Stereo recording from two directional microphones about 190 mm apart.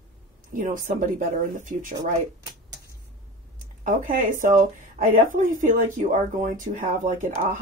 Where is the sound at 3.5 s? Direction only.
45° right (ahead or behind).